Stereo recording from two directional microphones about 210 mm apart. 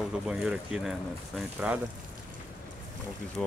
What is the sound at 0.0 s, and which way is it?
Speech, 5° right (ahead or behind).